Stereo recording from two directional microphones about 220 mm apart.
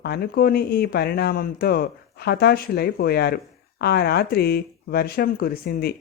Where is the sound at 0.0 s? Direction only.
45° left (ahead or behind).